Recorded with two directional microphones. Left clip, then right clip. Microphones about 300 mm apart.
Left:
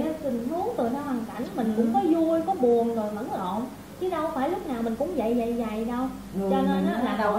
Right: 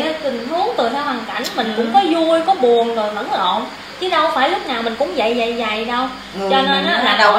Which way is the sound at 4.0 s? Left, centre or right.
Centre.